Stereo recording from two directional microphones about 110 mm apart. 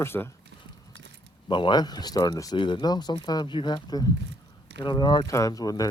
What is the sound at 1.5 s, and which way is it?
Speech, 45° left (ahead or behind).